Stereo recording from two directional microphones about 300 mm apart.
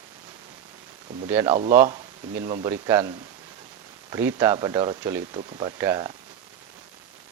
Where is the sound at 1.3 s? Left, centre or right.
Centre.